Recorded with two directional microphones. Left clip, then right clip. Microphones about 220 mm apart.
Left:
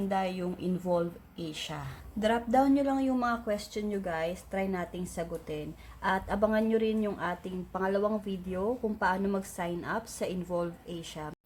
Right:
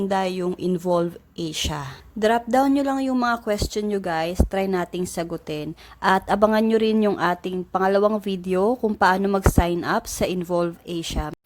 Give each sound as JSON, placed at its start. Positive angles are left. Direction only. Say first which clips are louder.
{"t": 0.1, "sound": "speech", "louder": "right 8 dB", "side_deg": -45}